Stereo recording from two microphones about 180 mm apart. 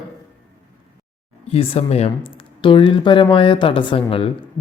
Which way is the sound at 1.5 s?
30° left (ahead or behind).